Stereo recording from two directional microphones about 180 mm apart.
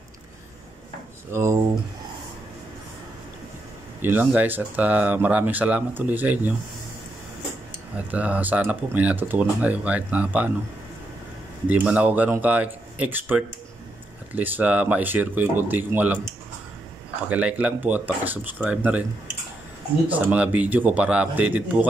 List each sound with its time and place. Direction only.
1.3 s speech: 15° right (ahead or behind)
4.0 s speech: 10° right (ahead or behind)
8.1 s speech: 10° right (ahead or behind)
11.7 s speech: 10° right (ahead or behind)
17.3 s speech: 5° right (ahead or behind)
20.1 s speech: 10° right (ahead or behind)